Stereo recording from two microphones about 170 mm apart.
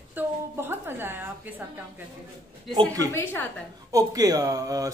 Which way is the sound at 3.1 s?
10° left (ahead or behind).